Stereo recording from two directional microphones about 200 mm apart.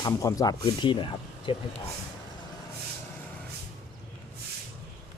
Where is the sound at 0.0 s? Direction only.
15° left (ahead or behind).